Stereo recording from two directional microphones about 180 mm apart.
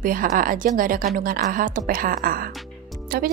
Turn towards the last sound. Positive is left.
turn(degrees=-60)  # may be behind; listen again after turning